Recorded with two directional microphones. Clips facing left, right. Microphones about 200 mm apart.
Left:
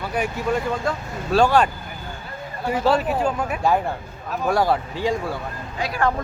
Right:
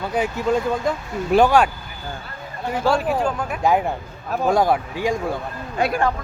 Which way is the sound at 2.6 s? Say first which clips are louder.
Even; 5° left (ahead or behind).